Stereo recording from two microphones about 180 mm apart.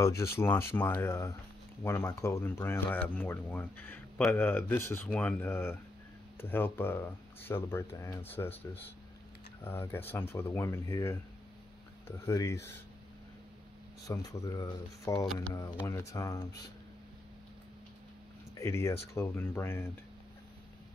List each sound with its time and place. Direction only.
0.0 s speech: 15° left (ahead or behind)
12.3 s speech: 15° left (ahead or behind)
14.0 s speech: 20° left (ahead or behind)
18.6 s speech: 15° left (ahead or behind)